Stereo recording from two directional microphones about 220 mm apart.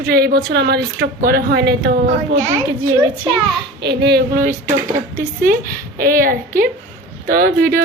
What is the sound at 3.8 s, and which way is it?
A woman's voice, 50° right (ahead or behind).